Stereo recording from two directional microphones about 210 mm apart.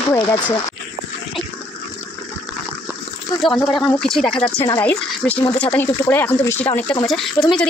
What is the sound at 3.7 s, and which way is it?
Speech, centre (ahead or behind).